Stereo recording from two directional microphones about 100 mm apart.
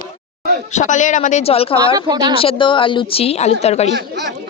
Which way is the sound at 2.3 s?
60° left (ahead or behind).